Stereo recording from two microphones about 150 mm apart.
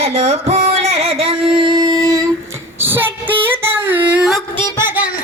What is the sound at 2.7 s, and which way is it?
Female singing, 15° right (ahead or behind).